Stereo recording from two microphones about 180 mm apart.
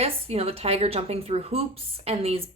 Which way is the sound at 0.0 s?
35° right (ahead or behind).